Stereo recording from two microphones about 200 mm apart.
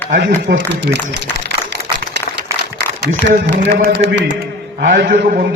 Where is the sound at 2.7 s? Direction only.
60° right (ahead or behind).